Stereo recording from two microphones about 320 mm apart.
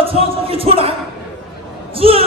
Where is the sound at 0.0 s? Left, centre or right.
Centre.